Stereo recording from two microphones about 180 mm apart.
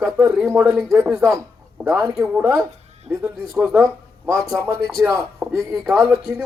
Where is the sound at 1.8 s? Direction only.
20° right (ahead or behind).